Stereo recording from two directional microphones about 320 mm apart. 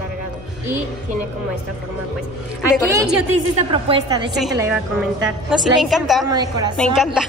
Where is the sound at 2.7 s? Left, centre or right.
Centre.